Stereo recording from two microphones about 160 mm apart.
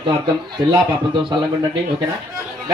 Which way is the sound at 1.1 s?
30° right (ahead or behind).